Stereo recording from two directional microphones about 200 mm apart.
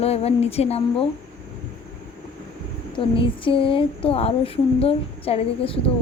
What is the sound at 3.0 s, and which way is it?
Speech, 25° left (ahead or behind).